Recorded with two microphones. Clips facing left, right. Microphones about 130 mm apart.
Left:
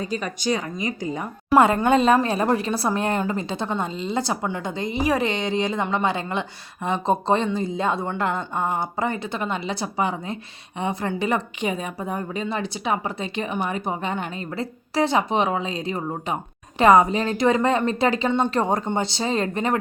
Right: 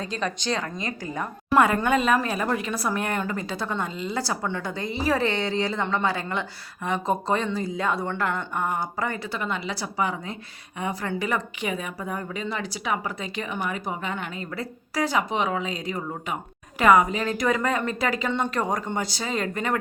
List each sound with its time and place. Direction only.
0.0 s a woman's voice: 10° left (ahead or behind); by 19.8 s 25° left (ahead or behind)